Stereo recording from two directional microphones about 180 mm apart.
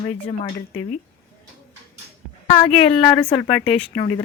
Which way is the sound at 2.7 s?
30° left (ahead or behind).